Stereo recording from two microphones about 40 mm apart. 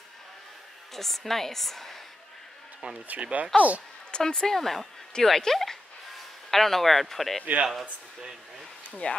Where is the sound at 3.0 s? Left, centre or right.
Right.